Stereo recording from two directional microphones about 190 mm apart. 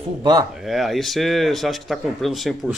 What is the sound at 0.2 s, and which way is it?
Speech, 20° right (ahead or behind).